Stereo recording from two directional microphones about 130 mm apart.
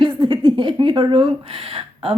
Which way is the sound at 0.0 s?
40° right (ahead or behind).